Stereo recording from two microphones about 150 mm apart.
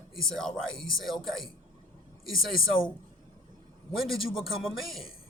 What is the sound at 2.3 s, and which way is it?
Speech, 70° left (ahead or behind).